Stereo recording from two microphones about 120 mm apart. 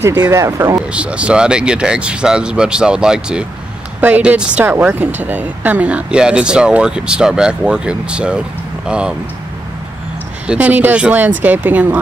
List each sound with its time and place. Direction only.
0.0 s speech: 20° right (ahead or behind)
0.9 s speech: 10° right (ahead or behind)
10.4 s speech: 10° right (ahead or behind)